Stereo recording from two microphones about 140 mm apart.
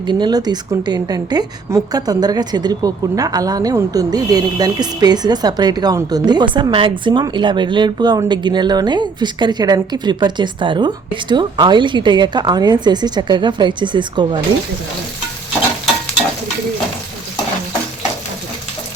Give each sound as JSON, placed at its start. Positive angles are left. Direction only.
{"t": 0.0, "sound": "a woman's voice", "side_deg": -35}